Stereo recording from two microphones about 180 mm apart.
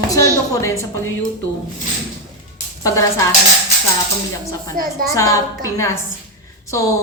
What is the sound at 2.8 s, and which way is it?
Speech, 20° left (ahead or behind).